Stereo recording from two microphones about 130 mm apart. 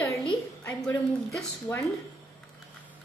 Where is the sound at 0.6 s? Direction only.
10° left (ahead or behind).